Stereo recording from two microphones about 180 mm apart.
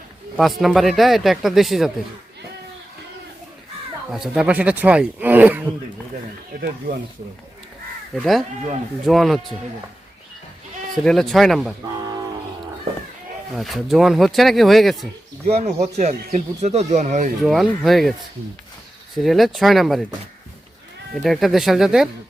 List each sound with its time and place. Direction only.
0.3 s speech: centre (ahead or behind)
4.1 s speech: 5° right (ahead or behind)
6.6 s speech: 65° right (ahead or behind)
8.1 s speech: centre (ahead or behind)
11.0 s speech: centre (ahead or behind)
13.6 s speech: centre (ahead or behind)
15.4 s speech: 35° right (ahead or behind)
17.4 s speech: centre (ahead or behind)
19.1 s speech: centre (ahead or behind)
21.2 s speech: centre (ahead or behind)